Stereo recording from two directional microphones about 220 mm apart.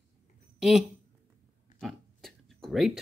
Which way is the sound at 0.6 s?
Centre (ahead or behind).